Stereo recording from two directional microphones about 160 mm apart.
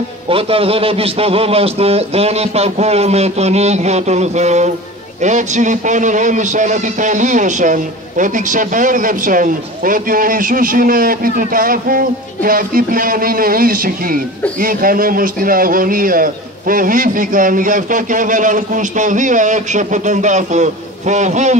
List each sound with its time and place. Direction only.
0.3 s a man's voice: 35° right (ahead or behind)